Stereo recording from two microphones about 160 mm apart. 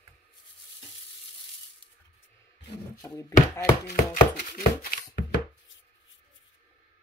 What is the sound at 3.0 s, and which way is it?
Speech, 20° left (ahead or behind).